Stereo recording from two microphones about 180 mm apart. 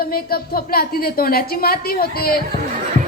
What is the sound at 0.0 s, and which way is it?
A woman's voice, 55° left (ahead or behind).